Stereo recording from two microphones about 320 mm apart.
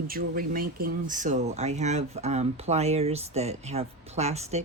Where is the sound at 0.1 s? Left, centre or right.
Right.